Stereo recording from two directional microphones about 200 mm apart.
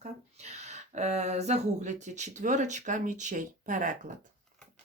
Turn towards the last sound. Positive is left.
turn(degrees=-40)  # may be behind; listen again after turning